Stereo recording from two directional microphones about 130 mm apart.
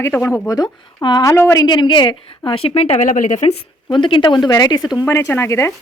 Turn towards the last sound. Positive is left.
turn(degrees=20)  # may be behind; listen again after turning